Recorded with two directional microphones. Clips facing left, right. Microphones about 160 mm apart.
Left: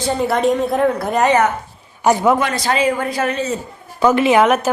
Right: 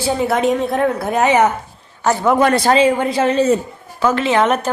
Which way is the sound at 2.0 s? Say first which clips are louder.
Left 2 dB; 15° left (ahead or behind).